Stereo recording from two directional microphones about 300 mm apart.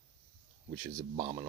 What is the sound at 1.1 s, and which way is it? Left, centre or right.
Speech, centre.